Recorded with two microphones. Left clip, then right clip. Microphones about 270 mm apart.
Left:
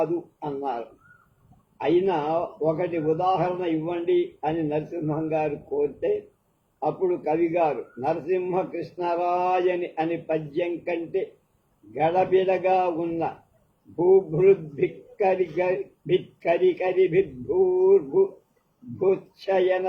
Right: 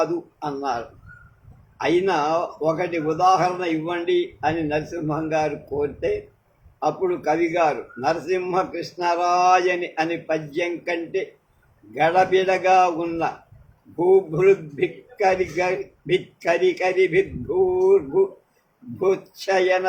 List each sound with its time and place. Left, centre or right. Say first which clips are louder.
0.0 s a man's voice: right 3 dB; right